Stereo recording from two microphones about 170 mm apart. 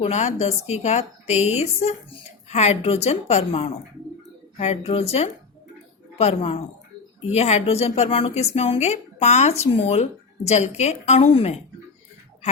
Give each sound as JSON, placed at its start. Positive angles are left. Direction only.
{"t": 0.0, "sound": "a woman's voice", "side_deg": 40}